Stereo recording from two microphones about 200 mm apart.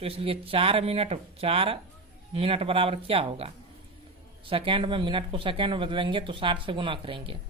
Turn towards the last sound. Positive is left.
turn(degrees=-25)  # may be behind; listen again after turning